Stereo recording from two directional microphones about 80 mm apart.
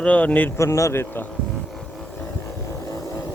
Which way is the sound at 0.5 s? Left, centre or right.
Left.